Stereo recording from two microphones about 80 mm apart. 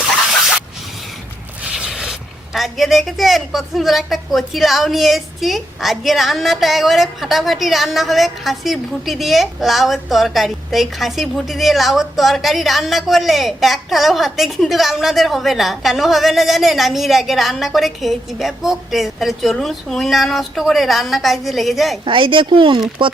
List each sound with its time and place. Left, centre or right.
0.3 s a sound: centre
1.6 s speech: centre
22.0 s speech: right